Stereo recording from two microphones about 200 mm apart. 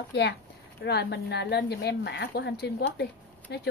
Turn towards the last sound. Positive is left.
turn(degrees=60)  # may be behind; listen again after turning